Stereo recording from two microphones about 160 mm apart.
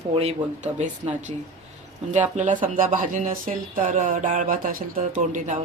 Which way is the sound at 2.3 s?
50° right (ahead or behind).